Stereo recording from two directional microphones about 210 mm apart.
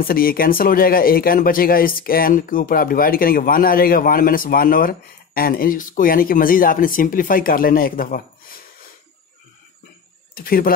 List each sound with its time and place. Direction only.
0.0 s speech: 45° left (ahead or behind)
10.3 s speech: 45° left (ahead or behind)